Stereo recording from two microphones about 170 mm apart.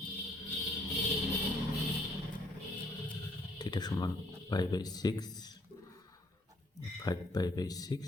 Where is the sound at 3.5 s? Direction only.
25° left (ahead or behind).